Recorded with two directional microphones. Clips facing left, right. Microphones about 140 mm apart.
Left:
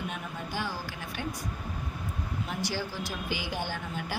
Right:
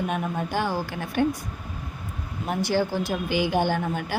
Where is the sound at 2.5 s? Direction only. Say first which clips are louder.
Right 12 dB; 55° right (ahead or behind).